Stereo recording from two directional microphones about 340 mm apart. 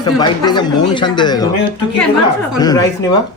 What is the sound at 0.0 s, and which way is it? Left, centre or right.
A man's voice, centre.